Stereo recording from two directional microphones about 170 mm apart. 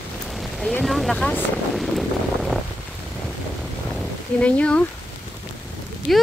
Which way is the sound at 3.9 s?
5° left (ahead or behind).